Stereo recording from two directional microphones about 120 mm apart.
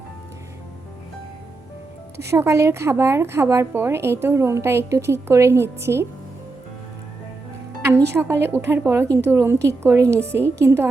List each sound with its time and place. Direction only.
2.3 s a woman's voice: 25° right (ahead or behind)
8.1 s a woman's voice: 20° right (ahead or behind)